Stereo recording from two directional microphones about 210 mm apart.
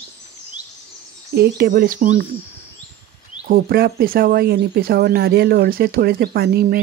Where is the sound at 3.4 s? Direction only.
45° right (ahead or behind).